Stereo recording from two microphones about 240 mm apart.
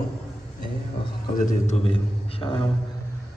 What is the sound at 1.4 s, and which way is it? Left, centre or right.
A man's voice, left.